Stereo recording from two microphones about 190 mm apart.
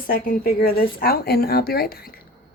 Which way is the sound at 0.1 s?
50° left (ahead or behind).